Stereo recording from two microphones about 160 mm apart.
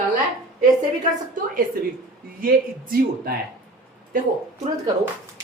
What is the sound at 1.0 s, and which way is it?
Speech, 55° right (ahead or behind).